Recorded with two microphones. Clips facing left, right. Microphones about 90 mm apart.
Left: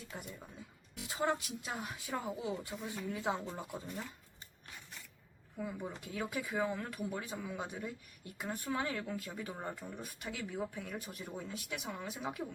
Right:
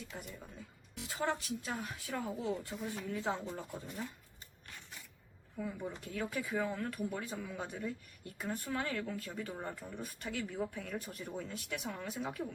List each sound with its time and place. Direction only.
0.1 s speech: 20° left (ahead or behind)
5.5 s speech: 10° left (ahead or behind)